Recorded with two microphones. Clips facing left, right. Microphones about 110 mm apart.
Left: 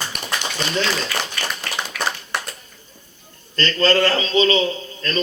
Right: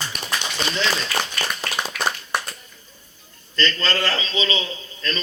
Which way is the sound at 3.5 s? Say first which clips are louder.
Left 6 dB; 45° left (ahead or behind).